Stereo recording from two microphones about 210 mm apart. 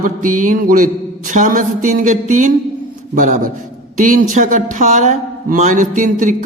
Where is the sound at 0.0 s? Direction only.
40° right (ahead or behind).